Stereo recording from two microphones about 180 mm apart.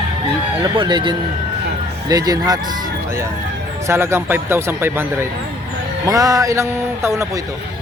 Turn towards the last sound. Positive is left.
turn(degrees=-15)  # may be behind; listen again after turning